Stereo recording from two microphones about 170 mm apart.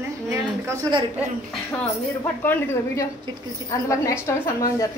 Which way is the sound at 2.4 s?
10° left (ahead or behind).